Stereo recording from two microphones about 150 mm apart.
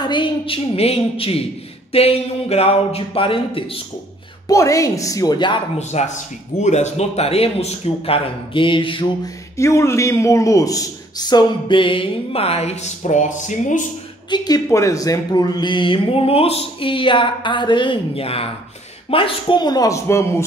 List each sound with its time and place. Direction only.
0.0 s a man's voice: 30° left (ahead or behind)
4.5 s speech: 20° left (ahead or behind)
5.8 s a man's voice: 50° left (ahead or behind)
9.6 s a man's voice: 20° left (ahead or behind); by 13.8 s 55° left (ahead or behind)
14.3 s a man's voice: 25° left (ahead or behind)